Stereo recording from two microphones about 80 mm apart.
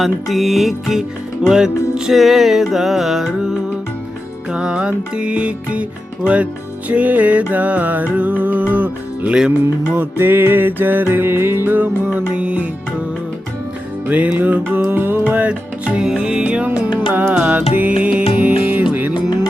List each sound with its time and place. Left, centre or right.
0.0 s music: centre
14.1 s music: centre